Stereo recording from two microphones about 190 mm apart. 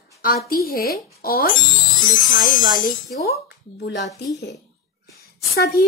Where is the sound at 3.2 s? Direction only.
60° left (ahead or behind).